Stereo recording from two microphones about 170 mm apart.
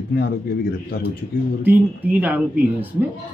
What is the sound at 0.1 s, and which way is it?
Speech, 60° left (ahead or behind).